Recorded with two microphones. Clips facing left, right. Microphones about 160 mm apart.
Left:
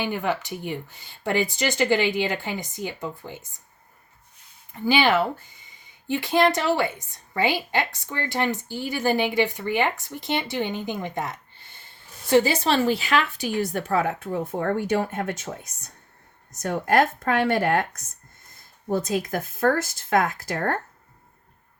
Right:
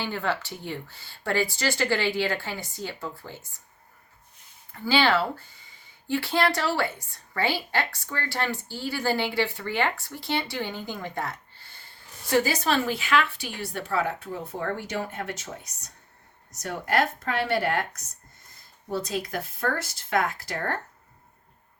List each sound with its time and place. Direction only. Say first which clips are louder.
0.0 s speech: left 3 dB; 15° left (ahead or behind)
4.7 s a woman's voice: left 2 dB; 15° left (ahead or behind); by 20.7 s 50° left (ahead or behind)